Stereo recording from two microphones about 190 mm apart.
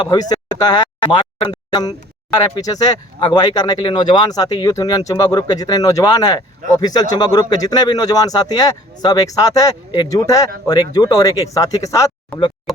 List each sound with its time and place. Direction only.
0.0 s speech: 20° left (ahead or behind)
12.7 s speech: centre (ahead or behind)